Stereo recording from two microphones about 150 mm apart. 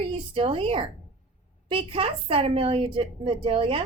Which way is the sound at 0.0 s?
35° right (ahead or behind).